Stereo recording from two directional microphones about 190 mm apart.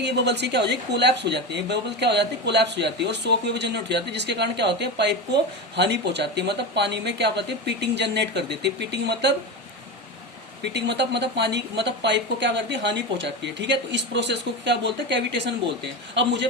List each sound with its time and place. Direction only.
0.0 s speech: 65° right (ahead or behind)
10.7 s a man's voice: 65° right (ahead or behind)